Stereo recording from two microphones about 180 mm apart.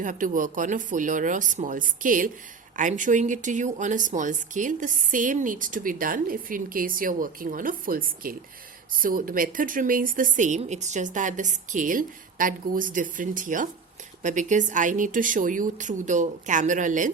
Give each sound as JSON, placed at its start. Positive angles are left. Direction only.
{"t": 0.0, "sound": "speech", "side_deg": -45}